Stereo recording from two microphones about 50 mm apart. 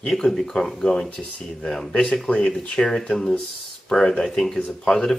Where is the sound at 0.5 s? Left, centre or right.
Centre.